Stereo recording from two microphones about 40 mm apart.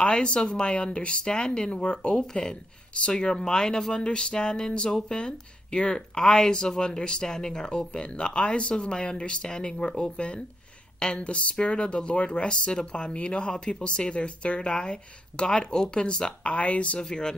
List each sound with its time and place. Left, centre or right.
0.0 s speech: left
17.0 s speech: centre